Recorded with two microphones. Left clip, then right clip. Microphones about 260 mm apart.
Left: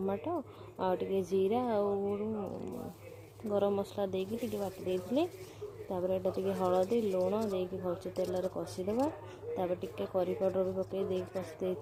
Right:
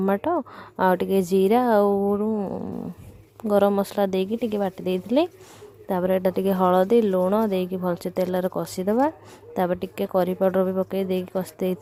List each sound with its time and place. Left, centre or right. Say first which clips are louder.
0.0 s a woman's voice: right 12 dB; right
3.5 s a woman's voice: right 12 dB; right